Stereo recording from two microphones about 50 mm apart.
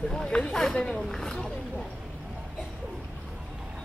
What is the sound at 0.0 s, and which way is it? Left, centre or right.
A woman's voice, centre.